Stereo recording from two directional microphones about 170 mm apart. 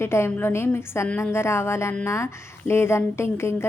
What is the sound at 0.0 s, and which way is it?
A woman's voice, 15° left (ahead or behind).